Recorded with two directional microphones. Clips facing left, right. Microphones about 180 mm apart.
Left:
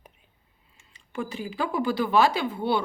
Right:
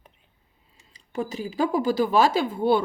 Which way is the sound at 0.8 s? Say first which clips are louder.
Right 3 dB; 40° right (ahead or behind).